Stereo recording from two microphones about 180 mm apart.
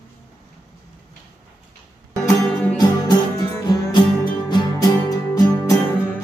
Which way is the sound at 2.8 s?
20° left (ahead or behind).